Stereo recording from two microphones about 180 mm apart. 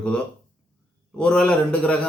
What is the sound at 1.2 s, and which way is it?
Speech, 5° left (ahead or behind).